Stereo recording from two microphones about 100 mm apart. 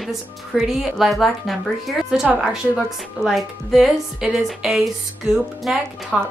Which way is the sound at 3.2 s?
Centre (ahead or behind).